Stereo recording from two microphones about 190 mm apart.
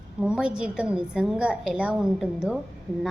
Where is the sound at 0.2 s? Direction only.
5° right (ahead or behind).